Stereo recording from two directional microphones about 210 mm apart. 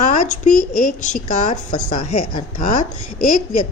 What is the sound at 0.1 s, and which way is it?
Speech, 35° left (ahead or behind).